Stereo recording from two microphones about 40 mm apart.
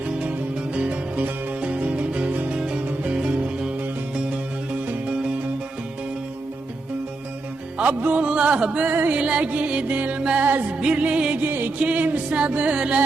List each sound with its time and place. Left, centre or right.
0.2 s music: right
2.6 s music: right
7.8 s music: right
8.9 s music: right
9.1 s music: right
9.5 s music: right
10.2 s music: right
10.4 s music: right
10.9 s music: right
11.4 s music: right
11.9 s music: right
12.7 s music: right